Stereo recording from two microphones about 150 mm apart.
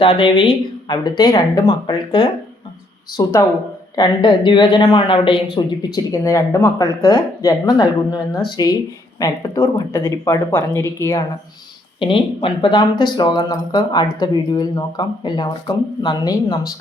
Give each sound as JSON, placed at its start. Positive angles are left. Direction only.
{"t": 0.0, "sound": "speech", "side_deg": 35}
{"t": 3.9, "sound": "speech", "side_deg": 30}
{"t": 11.9, "sound": "speech", "side_deg": 35}